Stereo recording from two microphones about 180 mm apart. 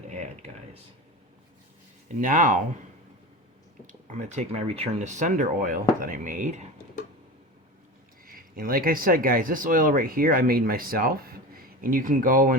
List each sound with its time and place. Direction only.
2.0 s speech: 50° right (ahead or behind)
3.8 s speech: 40° right (ahead or behind)
8.2 s speech: 55° right (ahead or behind)